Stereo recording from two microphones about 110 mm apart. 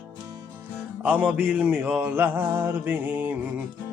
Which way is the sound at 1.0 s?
15° right (ahead or behind).